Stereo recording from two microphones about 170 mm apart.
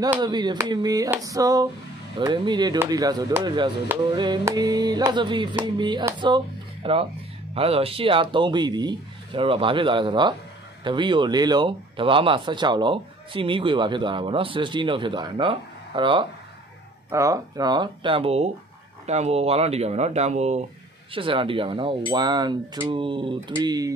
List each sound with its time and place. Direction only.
0.2 s speech: 25° right (ahead or behind)
17.1 s speech: 20° right (ahead or behind)